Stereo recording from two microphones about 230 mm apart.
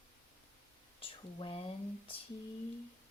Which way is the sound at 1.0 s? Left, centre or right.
Left.